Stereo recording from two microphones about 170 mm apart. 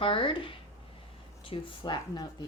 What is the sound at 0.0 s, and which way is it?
Speech, 30° left (ahead or behind).